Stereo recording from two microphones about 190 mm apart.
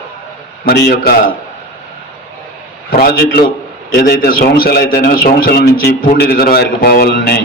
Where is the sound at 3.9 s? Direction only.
55° left (ahead or behind).